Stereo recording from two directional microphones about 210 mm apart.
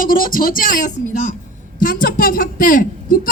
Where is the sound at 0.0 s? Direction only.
40° left (ahead or behind).